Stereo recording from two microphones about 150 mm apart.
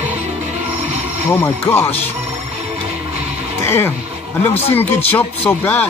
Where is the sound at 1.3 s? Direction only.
15° left (ahead or behind).